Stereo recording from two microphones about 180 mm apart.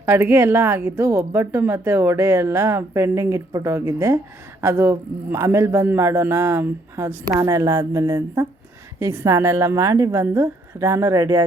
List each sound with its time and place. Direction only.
0.0 s a woman's voice: 10° right (ahead or behind)